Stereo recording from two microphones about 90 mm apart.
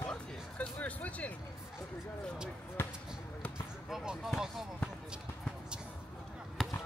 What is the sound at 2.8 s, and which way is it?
Basketball bounce, 25° left (ahead or behind).